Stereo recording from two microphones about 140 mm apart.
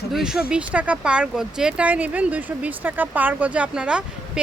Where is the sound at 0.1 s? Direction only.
5° right (ahead or behind).